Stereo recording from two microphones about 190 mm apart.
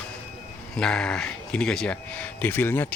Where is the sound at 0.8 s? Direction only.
5° left (ahead or behind).